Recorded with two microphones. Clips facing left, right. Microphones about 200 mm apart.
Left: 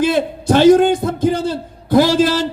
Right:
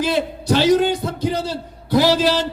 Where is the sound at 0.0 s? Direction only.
50° left (ahead or behind).